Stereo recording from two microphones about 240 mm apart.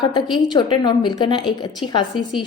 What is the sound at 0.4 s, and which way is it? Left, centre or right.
A woman's voice, centre.